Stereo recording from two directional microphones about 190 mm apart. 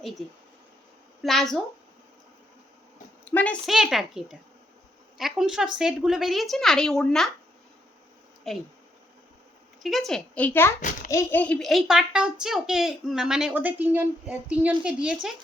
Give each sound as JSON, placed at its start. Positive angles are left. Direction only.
{"t": 1.2, "sound": "speech", "side_deg": 0}
{"t": 3.2, "sound": "speech", "side_deg": 10}
{"t": 8.5, "sound": "speech", "side_deg": 0}
{"t": 9.8, "sound": "speech", "side_deg": 0}
{"t": 10.8, "sound": "a child's voice", "side_deg": 45}
{"t": 11.1, "sound": "speech", "side_deg": 10}